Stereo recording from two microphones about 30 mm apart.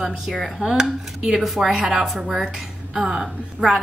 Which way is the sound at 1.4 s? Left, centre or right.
Centre.